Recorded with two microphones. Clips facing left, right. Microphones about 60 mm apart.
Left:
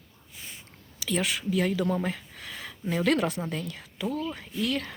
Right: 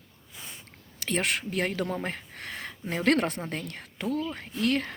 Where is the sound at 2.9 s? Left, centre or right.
Right.